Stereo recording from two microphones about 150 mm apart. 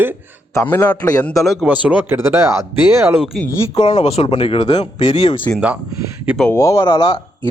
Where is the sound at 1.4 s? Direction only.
Centre (ahead or behind); by 3.1 s 20° right (ahead or behind).